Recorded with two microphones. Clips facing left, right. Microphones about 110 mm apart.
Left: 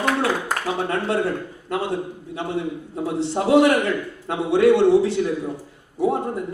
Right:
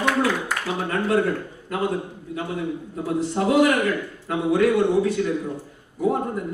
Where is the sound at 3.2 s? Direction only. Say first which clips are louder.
Left 3 dB; 30° left (ahead or behind).